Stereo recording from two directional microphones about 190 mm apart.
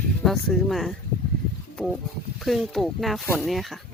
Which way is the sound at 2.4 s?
Centre (ahead or behind).